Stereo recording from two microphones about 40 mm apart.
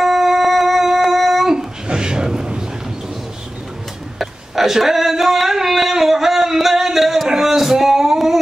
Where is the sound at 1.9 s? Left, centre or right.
Right.